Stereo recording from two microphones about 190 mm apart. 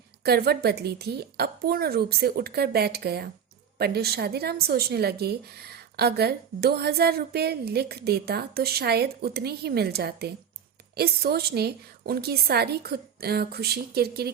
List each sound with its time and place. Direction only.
0.2 s a woman's voice: 55° right (ahead or behind)